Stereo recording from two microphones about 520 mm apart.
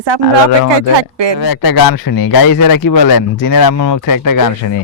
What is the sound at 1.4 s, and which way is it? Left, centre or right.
Speech, left.